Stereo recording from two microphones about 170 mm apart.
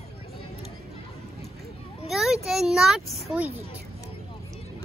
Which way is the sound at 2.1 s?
Centre (ahead or behind).